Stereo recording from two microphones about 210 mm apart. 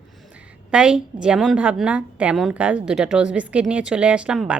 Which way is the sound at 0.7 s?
5° right (ahead or behind).